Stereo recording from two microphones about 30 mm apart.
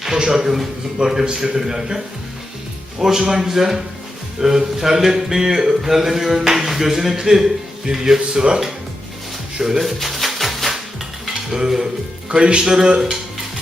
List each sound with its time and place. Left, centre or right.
0.2 s speech: centre
1.0 s speech: right
1.4 s speech: centre
3.0 s speech: centre
9.6 s speech: centre
9.8 s music: centre
11.3 s stir: centre
12.3 s speech: right